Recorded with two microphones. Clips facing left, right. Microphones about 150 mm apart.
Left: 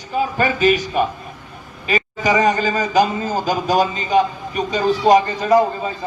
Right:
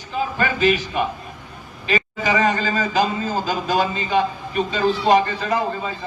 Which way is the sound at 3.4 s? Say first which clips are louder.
Left 5 dB; 40° left (ahead or behind).